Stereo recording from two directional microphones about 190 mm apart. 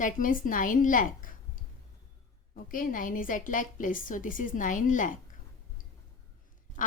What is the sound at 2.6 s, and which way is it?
A woman's voice, 45° left (ahead or behind).